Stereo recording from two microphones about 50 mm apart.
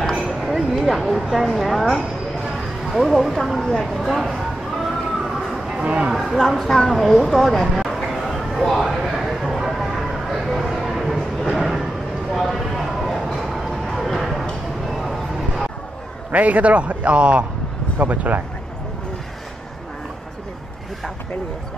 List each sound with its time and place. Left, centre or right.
0.4 s a sound: centre
1.2 s speech: centre
2.5 s a sound: centre
3.5 s speech: centre
3.8 s speech: centre
5.9 s a man's voice: right
6.1 s a woman's voice: centre
6.5 s a sound: centre
15.0 s vehicle: centre
16.3 s a man's voice: right
17.9 s speech: right